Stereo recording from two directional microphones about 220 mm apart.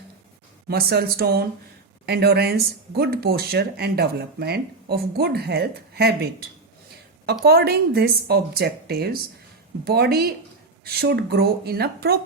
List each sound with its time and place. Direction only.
0.7 s speech: 45° right (ahead or behind)
7.4 s speech: 45° right (ahead or behind)